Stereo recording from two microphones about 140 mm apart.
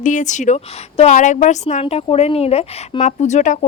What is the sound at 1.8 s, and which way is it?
A woman's voice, 40° left (ahead or behind).